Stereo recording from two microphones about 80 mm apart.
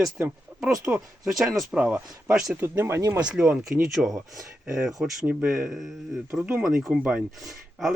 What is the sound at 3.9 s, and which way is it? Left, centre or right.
Speech, centre.